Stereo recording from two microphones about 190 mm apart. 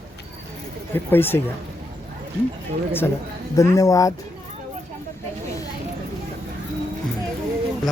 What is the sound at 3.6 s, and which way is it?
Speech, 15° left (ahead or behind).